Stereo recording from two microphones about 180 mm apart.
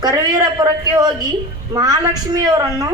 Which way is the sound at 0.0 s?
20° right (ahead or behind).